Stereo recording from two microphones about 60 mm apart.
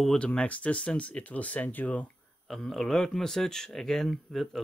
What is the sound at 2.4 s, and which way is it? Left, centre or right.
Speech, centre.